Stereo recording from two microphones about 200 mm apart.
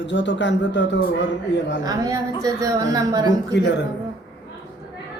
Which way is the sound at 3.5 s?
60° left (ahead or behind).